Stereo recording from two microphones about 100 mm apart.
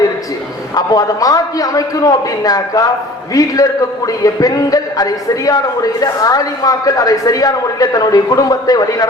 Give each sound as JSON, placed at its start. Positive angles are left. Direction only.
{"t": 0.7, "sound": "a man's voice", "side_deg": 40}